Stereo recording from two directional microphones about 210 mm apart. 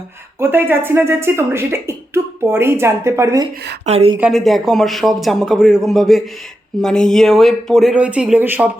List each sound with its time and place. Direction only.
0.3 s speech: 10° right (ahead or behind)
3.8 s a woman's voice: 30° right (ahead or behind)
4.2 s speech: centre (ahead or behind)